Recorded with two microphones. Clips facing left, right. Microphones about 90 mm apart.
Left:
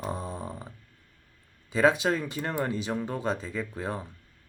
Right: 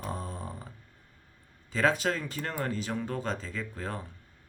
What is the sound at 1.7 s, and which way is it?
Speech, 15° left (ahead or behind).